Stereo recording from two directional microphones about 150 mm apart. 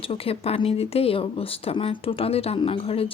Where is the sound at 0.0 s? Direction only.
40° left (ahead or behind).